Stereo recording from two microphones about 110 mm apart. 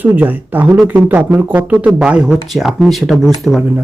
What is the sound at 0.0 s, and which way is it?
Speech, 15° right (ahead or behind).